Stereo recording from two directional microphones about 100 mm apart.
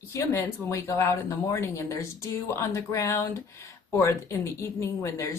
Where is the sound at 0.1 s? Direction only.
30° left (ahead or behind).